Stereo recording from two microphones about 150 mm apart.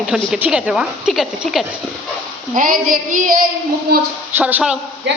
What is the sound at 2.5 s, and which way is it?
Child singing, 65° right (ahead or behind).